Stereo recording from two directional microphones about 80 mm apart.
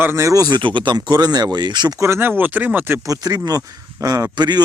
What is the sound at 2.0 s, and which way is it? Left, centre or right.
A man's voice, right.